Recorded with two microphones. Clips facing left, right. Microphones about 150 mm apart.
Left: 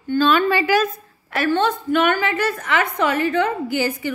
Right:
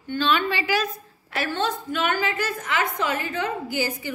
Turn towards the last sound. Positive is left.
turn(degrees=65)  # may be behind; listen again after turning